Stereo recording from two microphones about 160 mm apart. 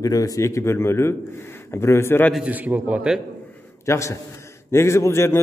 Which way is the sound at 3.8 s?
20° left (ahead or behind).